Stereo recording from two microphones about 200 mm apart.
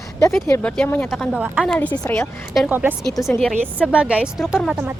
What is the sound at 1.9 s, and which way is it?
Speech, 15° left (ahead or behind).